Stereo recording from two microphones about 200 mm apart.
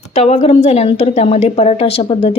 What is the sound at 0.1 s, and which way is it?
A woman's voice, 35° left (ahead or behind).